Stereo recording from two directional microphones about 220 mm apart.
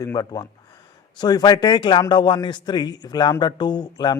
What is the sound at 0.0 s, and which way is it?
A man's voice, 15° left (ahead or behind).